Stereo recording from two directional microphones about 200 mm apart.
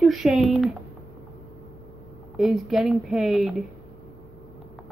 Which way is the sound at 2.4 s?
Centre (ahead or behind).